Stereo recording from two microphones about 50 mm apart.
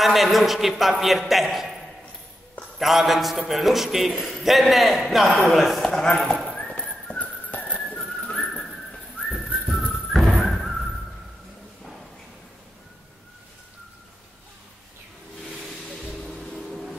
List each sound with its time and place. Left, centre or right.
0.0 s a man's voice: centre
2.8 s a man's voice: centre
6.1 s speech: centre
6.4 s horse: centre
6.7 s horse: left
9.3 s whistling: centre
10.1 s a sound: centre
15.6 s music: centre